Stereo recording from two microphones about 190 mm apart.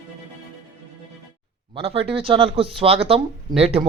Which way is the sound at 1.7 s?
30° right (ahead or behind).